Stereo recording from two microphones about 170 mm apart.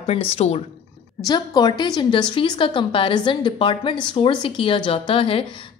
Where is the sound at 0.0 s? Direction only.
35° left (ahead or behind).